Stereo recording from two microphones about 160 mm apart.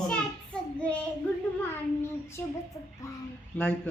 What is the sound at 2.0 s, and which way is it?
Speech, 15° left (ahead or behind).